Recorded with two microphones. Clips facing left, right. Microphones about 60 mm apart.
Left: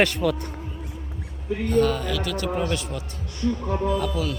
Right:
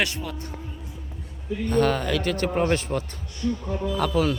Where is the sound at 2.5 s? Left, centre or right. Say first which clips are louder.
Right 3 dB; right.